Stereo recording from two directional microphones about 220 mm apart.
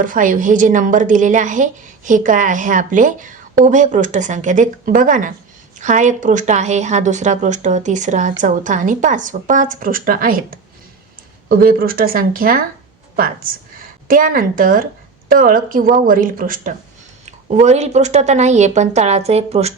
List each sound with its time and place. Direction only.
0.0 s a woman's voice: 35° right (ahead or behind)